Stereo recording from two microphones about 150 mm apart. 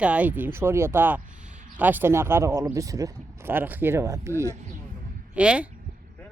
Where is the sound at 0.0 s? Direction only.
10° right (ahead or behind).